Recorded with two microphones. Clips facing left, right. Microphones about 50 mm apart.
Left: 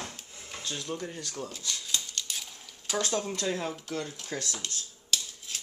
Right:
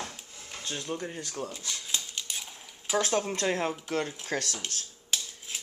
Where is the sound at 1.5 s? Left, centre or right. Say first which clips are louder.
Left 1 dB; centre.